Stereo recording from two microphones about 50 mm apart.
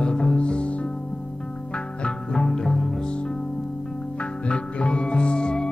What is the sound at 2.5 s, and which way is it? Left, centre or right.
Music, centre.